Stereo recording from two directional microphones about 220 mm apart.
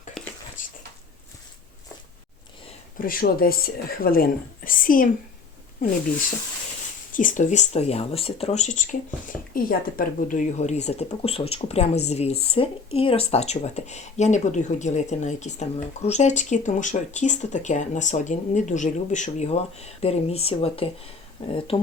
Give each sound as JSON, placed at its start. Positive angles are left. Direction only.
{"t": 3.0, "sound": "speech", "side_deg": 40}
{"t": 7.1, "sound": "speech", "side_deg": 35}